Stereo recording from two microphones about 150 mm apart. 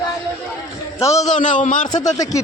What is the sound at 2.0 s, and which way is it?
Speech, 25° left (ahead or behind).